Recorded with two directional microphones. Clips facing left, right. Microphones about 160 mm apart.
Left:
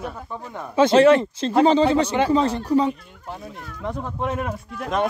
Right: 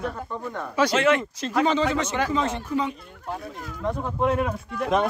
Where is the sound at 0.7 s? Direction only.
30° left (ahead or behind).